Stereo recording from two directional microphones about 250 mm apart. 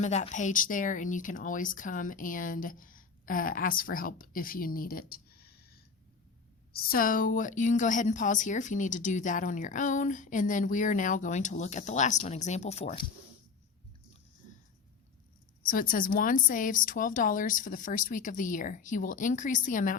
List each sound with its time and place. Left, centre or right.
0.0 s a woman's voice: left
15.6 s a woman's voice: left